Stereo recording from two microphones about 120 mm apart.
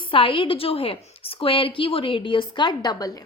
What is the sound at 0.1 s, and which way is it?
A woman's voice, 45° left (ahead or behind).